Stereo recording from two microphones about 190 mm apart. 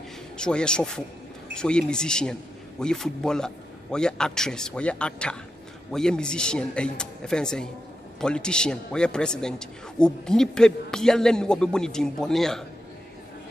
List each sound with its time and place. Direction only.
0.4 s a man's voice: 5° left (ahead or behind)